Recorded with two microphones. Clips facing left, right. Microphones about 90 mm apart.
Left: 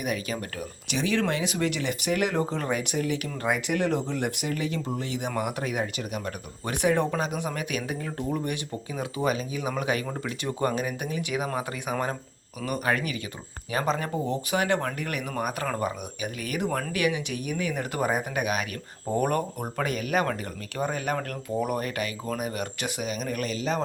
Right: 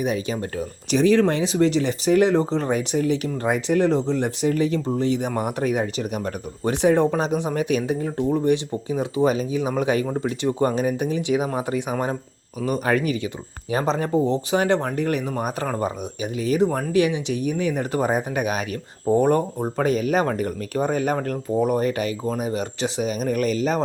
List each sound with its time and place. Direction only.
0.0 s speech: 30° right (ahead or behind)
19.0 s speech: 25° right (ahead or behind); by 23.8 s 45° right (ahead or behind)